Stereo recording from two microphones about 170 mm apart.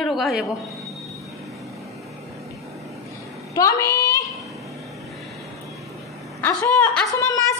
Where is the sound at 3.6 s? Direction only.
20° left (ahead or behind).